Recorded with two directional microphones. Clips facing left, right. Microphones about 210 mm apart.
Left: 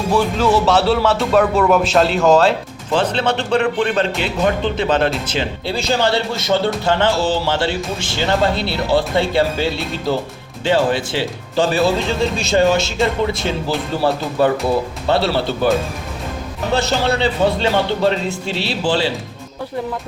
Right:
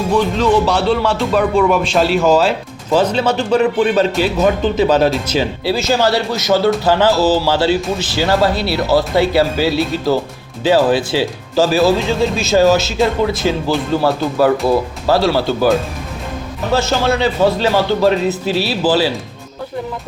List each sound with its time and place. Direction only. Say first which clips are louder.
0.2 s speech: right 2 dB; 5° left (ahead or behind)
6.1 s a man's voice: right 2 dB; 25° left (ahead or behind)
6.5 s speech: right 4 dB; 5° right (ahead or behind)
16.7 s speech: right 2 dB; centre (ahead or behind)